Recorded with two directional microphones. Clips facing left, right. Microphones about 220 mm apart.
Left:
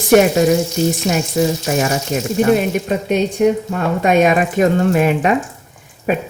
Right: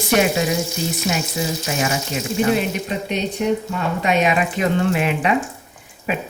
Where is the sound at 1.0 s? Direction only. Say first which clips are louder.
Left 7 dB; 45° left (ahead or behind).